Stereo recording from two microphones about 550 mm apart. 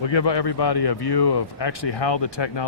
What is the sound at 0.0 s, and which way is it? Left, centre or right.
A man's voice, left.